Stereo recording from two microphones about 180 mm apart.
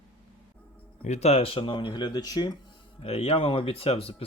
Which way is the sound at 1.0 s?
40° left (ahead or behind).